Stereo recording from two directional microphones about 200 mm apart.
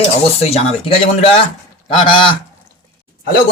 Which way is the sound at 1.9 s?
25° left (ahead or behind).